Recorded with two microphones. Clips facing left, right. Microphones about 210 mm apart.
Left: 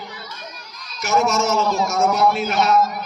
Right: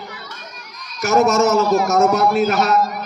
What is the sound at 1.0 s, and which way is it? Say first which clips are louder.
A man's voice: right 5 dB; 40° right (ahead or behind).